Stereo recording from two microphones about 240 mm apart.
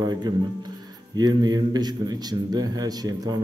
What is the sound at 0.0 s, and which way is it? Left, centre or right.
A man's voice, centre.